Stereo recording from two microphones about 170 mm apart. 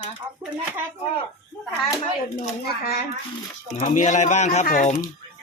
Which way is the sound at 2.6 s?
65° left (ahead or behind).